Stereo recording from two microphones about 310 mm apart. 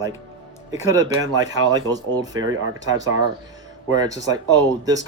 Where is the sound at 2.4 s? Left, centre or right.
Right.